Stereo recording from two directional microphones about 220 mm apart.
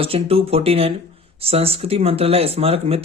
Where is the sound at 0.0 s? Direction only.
25° right (ahead or behind).